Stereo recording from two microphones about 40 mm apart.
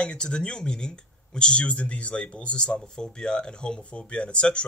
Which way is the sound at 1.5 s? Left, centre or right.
Left.